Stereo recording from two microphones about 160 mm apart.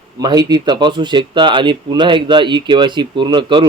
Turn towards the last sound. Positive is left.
turn(degrees=-30)  # may be behind; listen again after turning